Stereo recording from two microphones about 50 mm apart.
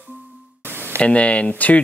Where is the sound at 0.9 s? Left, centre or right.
Left.